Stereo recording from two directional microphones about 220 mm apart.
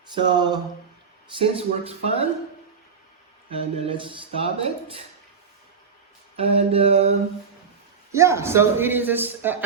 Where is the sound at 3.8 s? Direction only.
25° right (ahead or behind).